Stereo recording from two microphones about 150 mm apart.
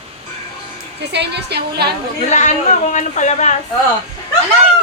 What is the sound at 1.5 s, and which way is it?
Speech, 90° right.